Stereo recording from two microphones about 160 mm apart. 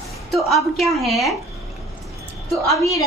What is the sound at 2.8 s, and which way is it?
Speech, 20° left (ahead or behind).